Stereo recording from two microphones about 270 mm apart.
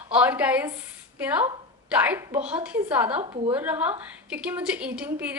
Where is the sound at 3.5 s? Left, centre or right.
Centre.